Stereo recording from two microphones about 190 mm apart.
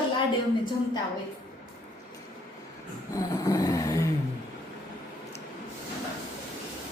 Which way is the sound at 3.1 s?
20° left (ahead or behind).